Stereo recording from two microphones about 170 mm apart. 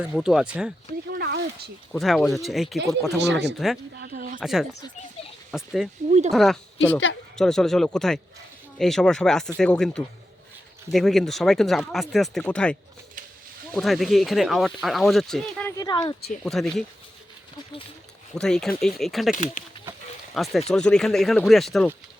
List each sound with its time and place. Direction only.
0.0 s speech: 5° right (ahead or behind)
1.2 s a sound: 70° right (ahead or behind)
1.9 s speech: centre (ahead or behind)
4.0 s speech: 55° right (ahead or behind)
4.4 s speech: 5° right (ahead or behind)
6.1 s speech: 40° right (ahead or behind)
6.3 s speech: centre (ahead or behind)
13.7 s speech: centre (ahead or behind)
15.7 s speech: 25° left (ahead or behind)
16.4 s speech: centre (ahead or behind)
18.3 s speech: 5° left (ahead or behind)
19.3 s speech: 50° left (ahead or behind)
20.3 s speech: centre (ahead or behind)